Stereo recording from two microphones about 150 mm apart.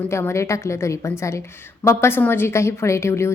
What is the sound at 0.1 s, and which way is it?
A woman's voice, 15° left (ahead or behind).